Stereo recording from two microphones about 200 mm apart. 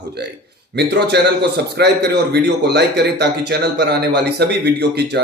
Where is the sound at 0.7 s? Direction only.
55° right (ahead or behind).